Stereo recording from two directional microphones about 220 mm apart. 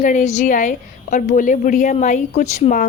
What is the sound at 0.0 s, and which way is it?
A woman's voice, 35° left (ahead or behind).